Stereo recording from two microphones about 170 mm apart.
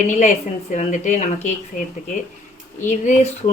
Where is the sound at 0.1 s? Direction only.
45° left (ahead or behind).